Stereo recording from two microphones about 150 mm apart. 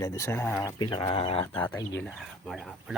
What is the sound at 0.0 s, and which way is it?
Speech, 20° left (ahead or behind).